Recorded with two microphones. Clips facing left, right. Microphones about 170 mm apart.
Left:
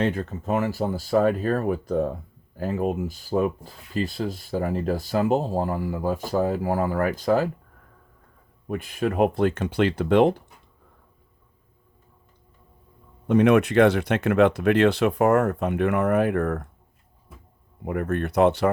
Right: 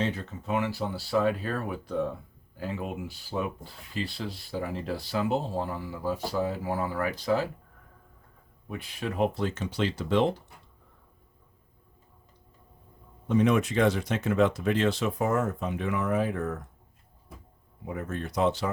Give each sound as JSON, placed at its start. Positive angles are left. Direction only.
{"t": 0.0, "sound": "speech", "side_deg": 50}
{"t": 8.6, "sound": "speech", "side_deg": 50}
{"t": 13.2, "sound": "speech", "side_deg": 65}
{"t": 17.8, "sound": "speech", "side_deg": 60}